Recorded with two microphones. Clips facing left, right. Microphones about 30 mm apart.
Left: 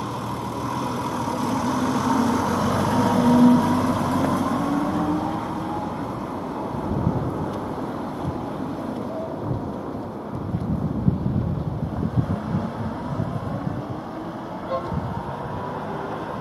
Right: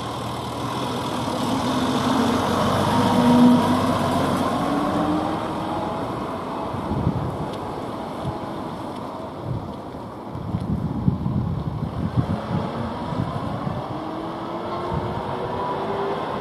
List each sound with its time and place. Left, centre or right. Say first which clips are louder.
0.6 s vehicle: right 1 dB; right
12.4 s vehicle: right 1 dB; right
15.5 s vehicle: right 6 dB; right